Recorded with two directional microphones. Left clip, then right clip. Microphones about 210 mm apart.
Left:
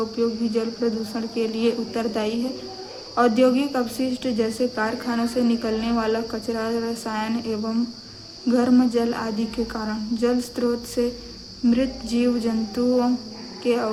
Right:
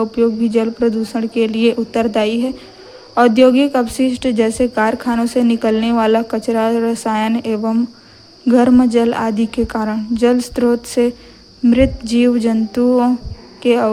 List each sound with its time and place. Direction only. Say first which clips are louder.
0.2 s a woman's voice: right 9 dB; 40° right (ahead or behind)